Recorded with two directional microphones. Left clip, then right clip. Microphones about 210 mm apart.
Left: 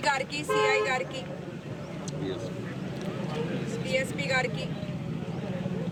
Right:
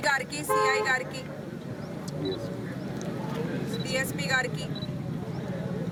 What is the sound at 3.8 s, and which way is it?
Speech, 5° right (ahead or behind).